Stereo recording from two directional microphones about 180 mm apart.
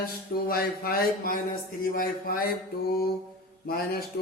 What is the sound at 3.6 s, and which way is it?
Speech, 55° left (ahead or behind).